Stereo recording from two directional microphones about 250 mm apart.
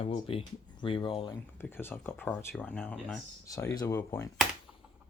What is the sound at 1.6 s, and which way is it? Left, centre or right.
Speech, centre.